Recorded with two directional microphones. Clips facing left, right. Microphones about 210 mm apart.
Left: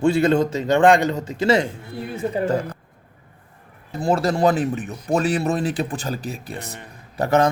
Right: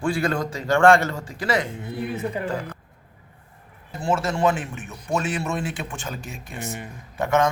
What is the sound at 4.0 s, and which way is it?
Speech, 35° left (ahead or behind).